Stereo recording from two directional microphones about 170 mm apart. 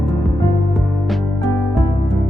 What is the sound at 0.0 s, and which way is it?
Music, centre (ahead or behind).